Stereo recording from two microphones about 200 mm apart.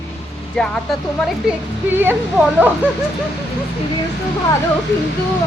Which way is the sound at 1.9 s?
10° right (ahead or behind).